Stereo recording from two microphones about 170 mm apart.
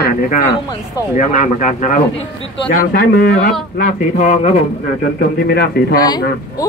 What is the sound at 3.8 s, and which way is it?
Speech, 45° left (ahead or behind).